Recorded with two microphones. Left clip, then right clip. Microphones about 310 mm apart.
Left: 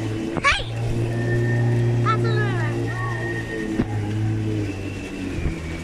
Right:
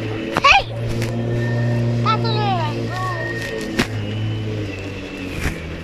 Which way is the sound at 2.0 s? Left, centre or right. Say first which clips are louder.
Right 4 dB; centre.